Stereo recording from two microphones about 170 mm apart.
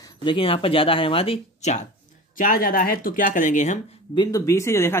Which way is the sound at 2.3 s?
55° left (ahead or behind).